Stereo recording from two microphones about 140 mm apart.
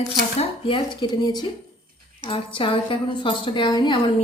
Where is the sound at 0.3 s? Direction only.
40° left (ahead or behind).